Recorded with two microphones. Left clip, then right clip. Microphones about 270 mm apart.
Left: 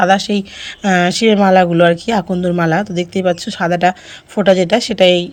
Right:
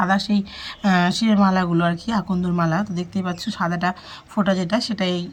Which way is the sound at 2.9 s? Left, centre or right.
Centre.